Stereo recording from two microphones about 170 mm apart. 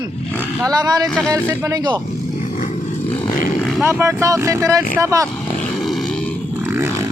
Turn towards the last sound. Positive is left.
turn(degrees=-20)  # may be behind; listen again after turning